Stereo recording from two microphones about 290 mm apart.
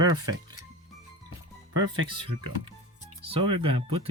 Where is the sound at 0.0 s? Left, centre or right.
Centre.